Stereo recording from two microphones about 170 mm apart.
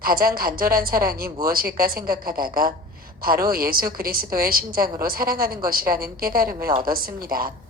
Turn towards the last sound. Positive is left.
turn(degrees=-60)  # may be behind; listen again after turning